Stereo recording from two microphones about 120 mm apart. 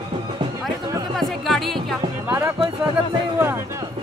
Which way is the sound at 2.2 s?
20° right (ahead or behind).